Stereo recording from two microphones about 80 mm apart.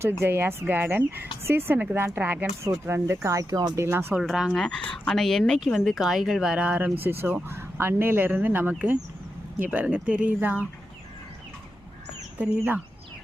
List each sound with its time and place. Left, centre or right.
0.2 s speech: right
3.2 s speech: right
3.8 s speech: right
4.2 s a woman's voice: centre
12.4 s speech: centre